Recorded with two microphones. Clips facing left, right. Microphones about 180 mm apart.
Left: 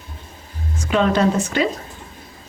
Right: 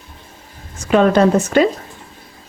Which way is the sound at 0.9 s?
50° right (ahead or behind).